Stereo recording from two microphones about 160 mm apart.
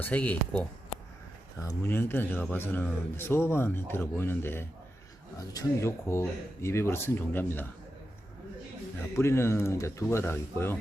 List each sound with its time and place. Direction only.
0.0 s speech: 10° left (ahead or behind)
9.1 s speech: 15° left (ahead or behind)